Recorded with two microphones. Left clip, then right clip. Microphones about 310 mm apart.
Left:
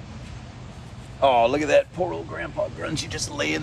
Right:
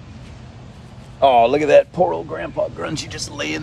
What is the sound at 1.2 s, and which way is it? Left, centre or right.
Speech, right.